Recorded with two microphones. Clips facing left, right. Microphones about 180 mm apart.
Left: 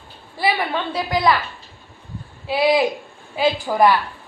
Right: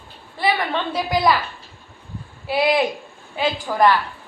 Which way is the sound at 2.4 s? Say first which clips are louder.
Left 2 dB; centre (ahead or behind).